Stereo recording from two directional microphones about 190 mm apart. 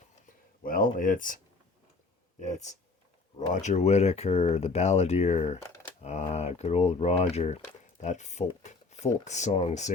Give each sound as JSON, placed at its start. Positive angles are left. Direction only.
{"t": 0.6, "sound": "speech", "side_deg": 45}
{"t": 2.4, "sound": "speech", "side_deg": 40}